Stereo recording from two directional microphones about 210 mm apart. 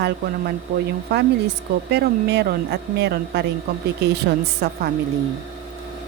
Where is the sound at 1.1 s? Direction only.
50° right (ahead or behind).